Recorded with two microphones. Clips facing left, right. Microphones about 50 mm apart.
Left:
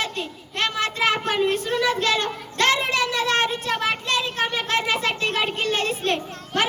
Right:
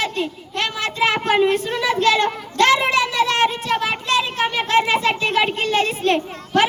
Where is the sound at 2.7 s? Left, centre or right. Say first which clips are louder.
Right 5 dB; right.